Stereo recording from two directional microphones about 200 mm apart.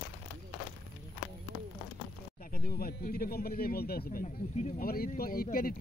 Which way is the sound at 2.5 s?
45° left (ahead or behind).